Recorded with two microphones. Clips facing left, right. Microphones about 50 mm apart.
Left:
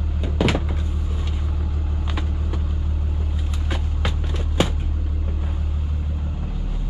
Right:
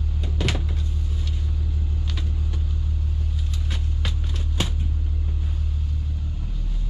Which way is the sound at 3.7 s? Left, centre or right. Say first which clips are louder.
Left 7 dB; centre.